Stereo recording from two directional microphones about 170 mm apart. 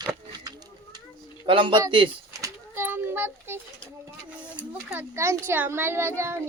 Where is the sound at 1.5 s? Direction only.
30° right (ahead or behind).